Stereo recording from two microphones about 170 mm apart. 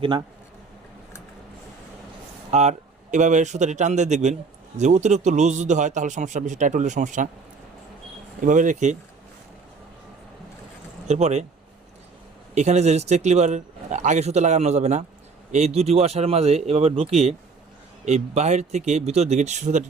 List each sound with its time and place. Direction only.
2.5 s speech: 40° right (ahead or behind)
8.4 s speech: 50° right (ahead or behind)
11.1 s speech: 40° right (ahead or behind)
12.5 s speech: 40° right (ahead or behind)